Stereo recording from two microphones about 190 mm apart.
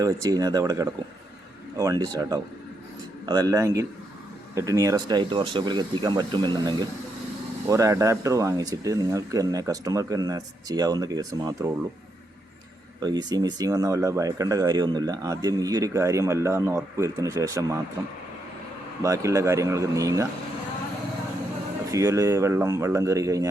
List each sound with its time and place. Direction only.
0.0 s speech: 20° right (ahead or behind)
13.0 s speech: 20° right (ahead or behind)
19.0 s speech: 15° right (ahead or behind)
21.8 s speech: 15° right (ahead or behind)